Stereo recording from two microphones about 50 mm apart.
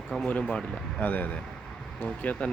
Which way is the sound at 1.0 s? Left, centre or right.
Left.